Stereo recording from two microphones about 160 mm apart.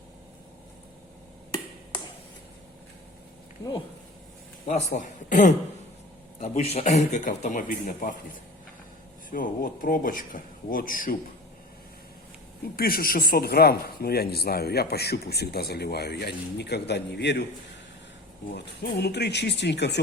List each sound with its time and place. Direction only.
4.6 s a man's voice: 45° left (ahead or behind)
6.4 s a man's voice: 40° left (ahead or behind); by 8.1 s 60° left (ahead or behind)
9.3 s speech: 60° left (ahead or behind)
12.7 s speech: 70° left (ahead or behind); by 17.4 s 90° left
18.5 s speech: 90° left